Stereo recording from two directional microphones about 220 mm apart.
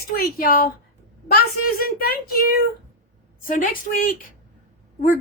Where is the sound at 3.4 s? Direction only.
40° left (ahead or behind).